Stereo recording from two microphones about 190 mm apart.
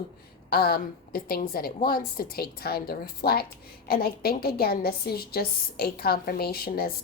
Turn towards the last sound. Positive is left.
turn(degrees=50)  # may be behind; listen again after turning